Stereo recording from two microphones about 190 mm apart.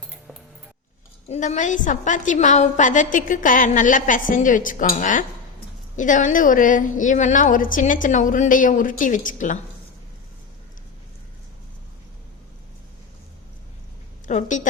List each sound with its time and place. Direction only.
1.3 s a woman's voice: 40° left (ahead or behind)
14.3 s a woman's voice: 40° left (ahead or behind)